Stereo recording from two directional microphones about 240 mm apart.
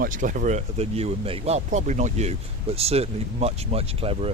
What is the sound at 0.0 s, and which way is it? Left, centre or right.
Speech, right.